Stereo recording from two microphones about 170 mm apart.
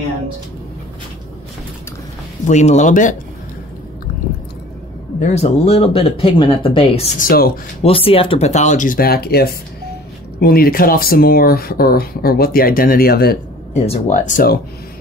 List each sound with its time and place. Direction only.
2.4 s speech: 45° left (ahead or behind)
5.2 s speech: 40° left (ahead or behind)
7.2 s speech: 60° left (ahead or behind)
7.8 s speech: 35° left (ahead or behind); by 13.4 s 65° left (ahead or behind)
13.7 s speech: 45° left (ahead or behind)